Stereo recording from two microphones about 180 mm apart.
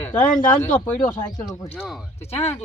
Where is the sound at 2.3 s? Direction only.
35° left (ahead or behind).